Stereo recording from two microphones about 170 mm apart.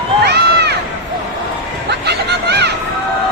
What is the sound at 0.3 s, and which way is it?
Run, 75° right (ahead or behind).